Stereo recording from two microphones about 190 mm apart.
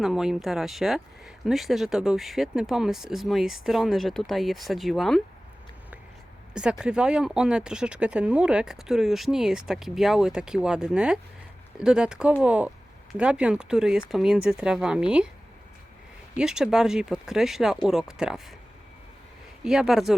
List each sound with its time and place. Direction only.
0.0 s speech: centre (ahead or behind)
6.5 s speech: 5° right (ahead or behind)
16.4 s speech: 5° right (ahead or behind)
19.6 s speech: centre (ahead or behind)